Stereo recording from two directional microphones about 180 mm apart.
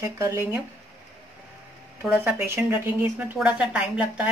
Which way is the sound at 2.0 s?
10° right (ahead or behind).